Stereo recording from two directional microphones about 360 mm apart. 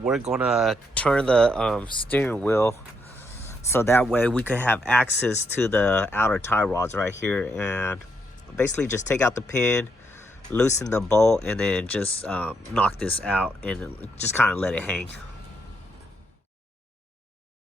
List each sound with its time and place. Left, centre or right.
0.0 s speech: centre
10.2 s speech: centre